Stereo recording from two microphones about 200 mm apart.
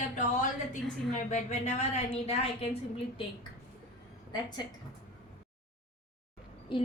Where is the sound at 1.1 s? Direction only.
35° left (ahead or behind).